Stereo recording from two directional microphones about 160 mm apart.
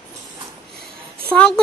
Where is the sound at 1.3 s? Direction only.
10° left (ahead or behind).